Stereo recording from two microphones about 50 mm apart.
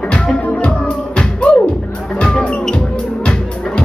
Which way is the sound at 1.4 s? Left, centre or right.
Centre.